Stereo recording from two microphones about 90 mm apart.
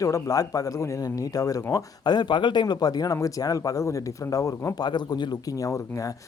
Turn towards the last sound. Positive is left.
turn(degrees=35)  # may be behind; listen again after turning